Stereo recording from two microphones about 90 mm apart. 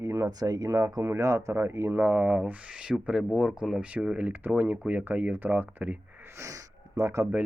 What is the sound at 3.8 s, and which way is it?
Speech, 15° right (ahead or behind).